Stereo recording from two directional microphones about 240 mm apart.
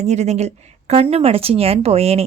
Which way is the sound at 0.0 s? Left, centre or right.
Right.